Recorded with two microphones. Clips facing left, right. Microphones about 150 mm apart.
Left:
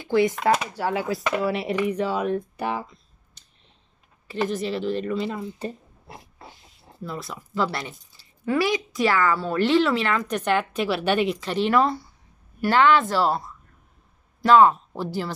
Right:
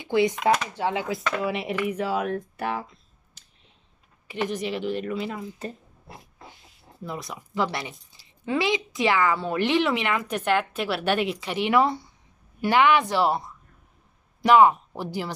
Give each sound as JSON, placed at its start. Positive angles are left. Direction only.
{"t": 0.0, "sound": "speech", "side_deg": -20}
{"t": 0.7, "sound": "chopping", "side_deg": -20}
{"t": 1.9, "sound": "speech", "side_deg": -5}
{"t": 4.5, "sound": "speech", "side_deg": -15}
{"t": 7.0, "sound": "speech", "side_deg": -15}
{"t": 11.3, "sound": "speech", "side_deg": -15}